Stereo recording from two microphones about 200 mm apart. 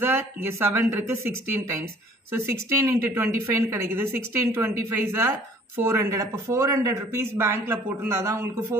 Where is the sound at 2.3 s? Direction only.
15° right (ahead or behind).